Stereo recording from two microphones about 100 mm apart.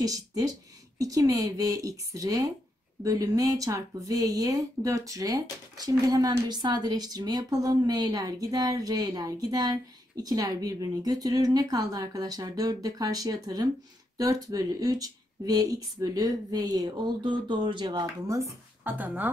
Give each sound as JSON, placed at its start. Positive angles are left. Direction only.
{"t": 0.0, "sound": "a woman's voice", "side_deg": -35}
{"t": 18.9, "sound": "speech", "side_deg": -20}